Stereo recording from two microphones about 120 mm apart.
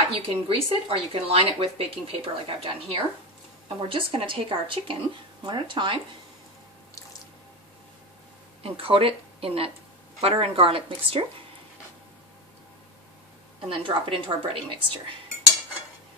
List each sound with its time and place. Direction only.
0.1 s speech: 55° right (ahead or behind)
8.6 s speech: 50° right (ahead or behind)
13.7 s speech: 50° right (ahead or behind)